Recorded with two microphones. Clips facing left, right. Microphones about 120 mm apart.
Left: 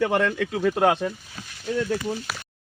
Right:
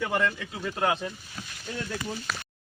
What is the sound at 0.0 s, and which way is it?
Speech, 65° left (ahead or behind).